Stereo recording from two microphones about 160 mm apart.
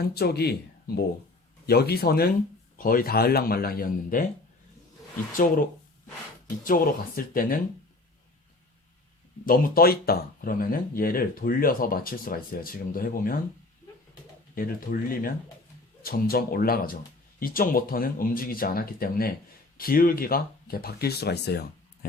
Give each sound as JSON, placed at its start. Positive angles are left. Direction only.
{"t": 0.1, "sound": "speech", "side_deg": 85}
{"t": 1.6, "sound": "speech", "side_deg": 80}
{"t": 2.7, "sound": "speech", "side_deg": 60}
{"t": 6.7, "sound": "speech", "side_deg": 60}
{"t": 9.5, "sound": "speech", "side_deg": 70}
{"t": 14.5, "sound": "speech", "side_deg": 65}